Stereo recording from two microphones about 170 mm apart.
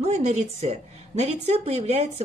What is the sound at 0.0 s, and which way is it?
A woman's voice, 40° right (ahead or behind).